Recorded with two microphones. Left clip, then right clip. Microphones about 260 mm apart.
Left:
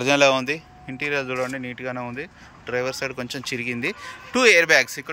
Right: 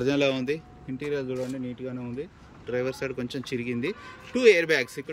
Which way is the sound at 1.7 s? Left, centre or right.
Left.